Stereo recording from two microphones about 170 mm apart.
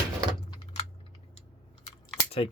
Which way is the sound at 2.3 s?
30° left (ahead or behind).